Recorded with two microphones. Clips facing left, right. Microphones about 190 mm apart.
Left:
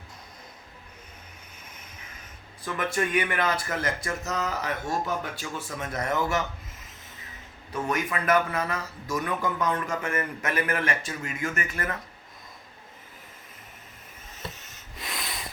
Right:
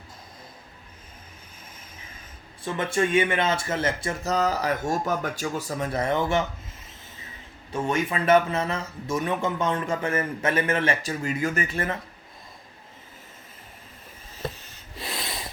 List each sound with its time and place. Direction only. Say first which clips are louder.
2.6 s speech: right 3 dB; 25° right (ahead or behind)
7.7 s speech: right 3 dB; 25° right (ahead or behind)
14.5 s rub: right 2 dB; 30° right (ahead or behind)